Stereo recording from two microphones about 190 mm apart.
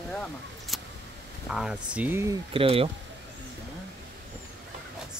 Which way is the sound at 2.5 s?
30° right (ahead or behind).